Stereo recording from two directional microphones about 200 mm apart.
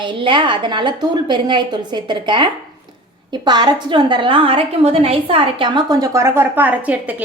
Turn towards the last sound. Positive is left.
turn(degrees=-5)  # may be behind; listen again after turning